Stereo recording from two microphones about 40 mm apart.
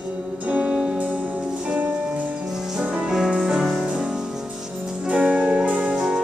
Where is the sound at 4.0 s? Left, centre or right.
Centre.